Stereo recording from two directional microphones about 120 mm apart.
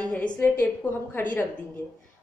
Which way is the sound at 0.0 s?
10° left (ahead or behind).